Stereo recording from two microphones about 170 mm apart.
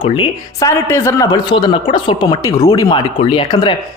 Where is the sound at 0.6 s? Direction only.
15° left (ahead or behind).